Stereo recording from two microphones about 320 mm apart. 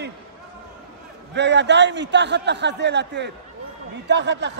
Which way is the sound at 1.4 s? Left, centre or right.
Right.